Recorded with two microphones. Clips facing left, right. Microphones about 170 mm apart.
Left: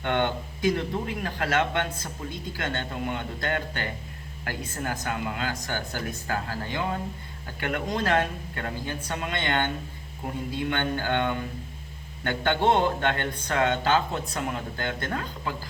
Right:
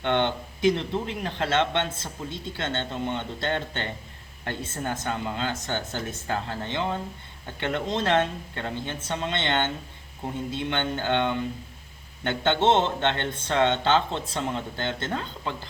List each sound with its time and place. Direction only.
0.0 s speech: 20° right (ahead or behind)